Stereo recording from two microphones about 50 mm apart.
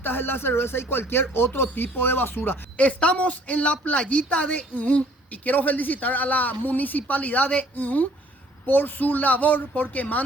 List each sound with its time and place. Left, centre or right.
0.0 s speech: left
2.7 s speech: left